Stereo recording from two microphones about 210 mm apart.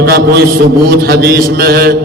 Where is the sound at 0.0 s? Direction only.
50° right (ahead or behind).